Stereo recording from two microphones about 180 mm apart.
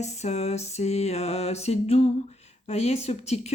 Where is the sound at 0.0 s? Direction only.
40° left (ahead or behind).